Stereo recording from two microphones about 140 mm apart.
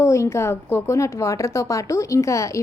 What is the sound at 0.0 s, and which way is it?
A woman's voice, 20° left (ahead or behind).